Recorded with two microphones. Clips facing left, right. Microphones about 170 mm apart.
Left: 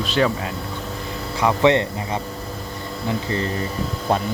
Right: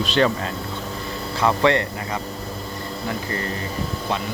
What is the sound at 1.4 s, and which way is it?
Speech, 20° left (ahead or behind).